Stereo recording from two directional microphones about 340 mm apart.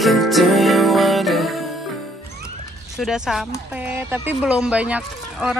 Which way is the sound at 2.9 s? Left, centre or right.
Centre.